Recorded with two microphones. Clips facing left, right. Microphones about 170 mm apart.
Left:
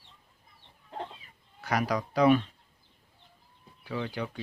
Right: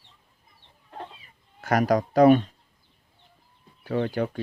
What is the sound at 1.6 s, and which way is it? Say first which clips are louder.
Speech: right 7 dB; 45° right (ahead or behind).